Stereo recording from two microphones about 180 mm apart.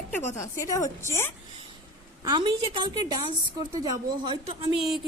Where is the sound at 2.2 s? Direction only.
25° right (ahead or behind).